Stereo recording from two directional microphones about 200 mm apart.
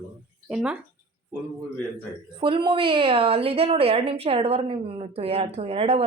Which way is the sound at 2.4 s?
25° right (ahead or behind).